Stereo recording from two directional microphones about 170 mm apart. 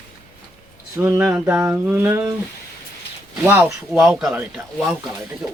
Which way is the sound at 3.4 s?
10° right (ahead or behind).